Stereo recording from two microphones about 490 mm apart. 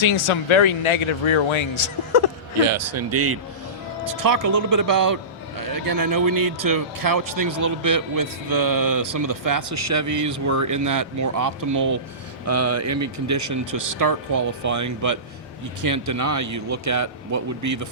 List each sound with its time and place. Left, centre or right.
0.0 s speech: left
2.6 s speech: right
4.0 s a man's voice: right